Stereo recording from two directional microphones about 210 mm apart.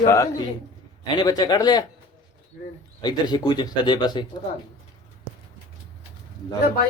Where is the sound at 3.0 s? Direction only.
20° left (ahead or behind).